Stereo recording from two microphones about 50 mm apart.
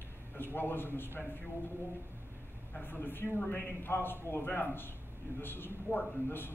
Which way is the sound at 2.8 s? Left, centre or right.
Left.